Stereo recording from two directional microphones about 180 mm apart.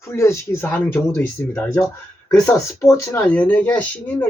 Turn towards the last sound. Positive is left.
turn(degrees=10)  # may be behind; listen again after turning